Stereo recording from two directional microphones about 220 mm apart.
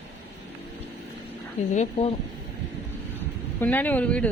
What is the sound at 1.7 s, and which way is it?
Speech, 30° left (ahead or behind).